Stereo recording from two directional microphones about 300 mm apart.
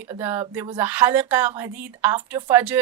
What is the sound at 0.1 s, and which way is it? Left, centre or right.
A woman's voice, centre.